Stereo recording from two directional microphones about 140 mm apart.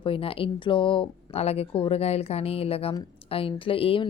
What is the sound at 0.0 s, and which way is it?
A woman's voice, 40° left (ahead or behind).